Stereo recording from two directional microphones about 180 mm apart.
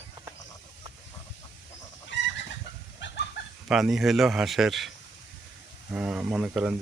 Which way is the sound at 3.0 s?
90° left.